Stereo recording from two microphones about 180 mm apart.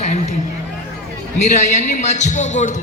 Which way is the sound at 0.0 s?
40° left (ahead or behind).